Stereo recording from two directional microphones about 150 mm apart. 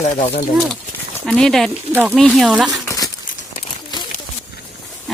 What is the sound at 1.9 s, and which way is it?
Speech, 10° right (ahead or behind).